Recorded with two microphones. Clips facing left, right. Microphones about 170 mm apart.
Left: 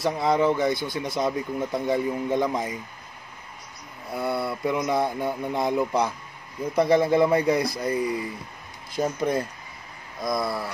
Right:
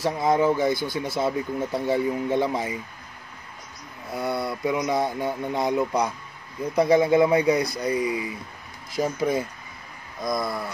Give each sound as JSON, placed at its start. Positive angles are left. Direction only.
{"t": 0.0, "sound": "speech", "side_deg": 0}
{"t": 4.1, "sound": "speech", "side_deg": 0}